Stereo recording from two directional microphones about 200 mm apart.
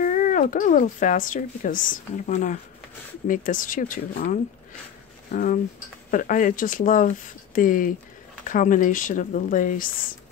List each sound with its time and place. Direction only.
0.0 s speech: 40° left (ahead or behind)